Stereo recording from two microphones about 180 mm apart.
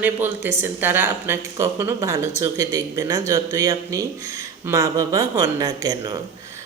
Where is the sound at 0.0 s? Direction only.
10° right (ahead or behind).